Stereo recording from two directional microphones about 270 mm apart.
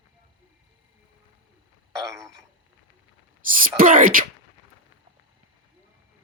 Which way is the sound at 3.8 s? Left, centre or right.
Right.